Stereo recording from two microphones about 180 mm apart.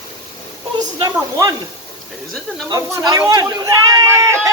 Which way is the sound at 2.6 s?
20° right (ahead or behind).